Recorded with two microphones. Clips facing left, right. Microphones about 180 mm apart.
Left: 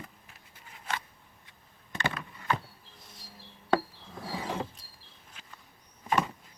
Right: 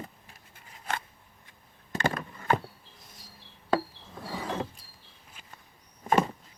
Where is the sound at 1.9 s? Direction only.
45° right (ahead or behind).